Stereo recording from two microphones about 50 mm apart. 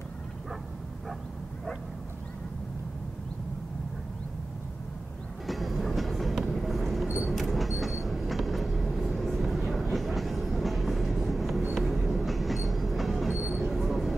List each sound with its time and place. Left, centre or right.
5.5 s train: centre